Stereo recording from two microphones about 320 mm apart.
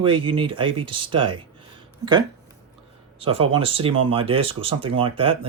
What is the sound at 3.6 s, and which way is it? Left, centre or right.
Speech, centre.